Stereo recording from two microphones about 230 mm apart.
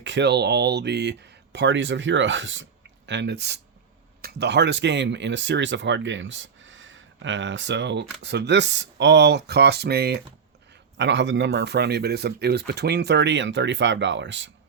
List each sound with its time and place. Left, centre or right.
0.0 s speech: right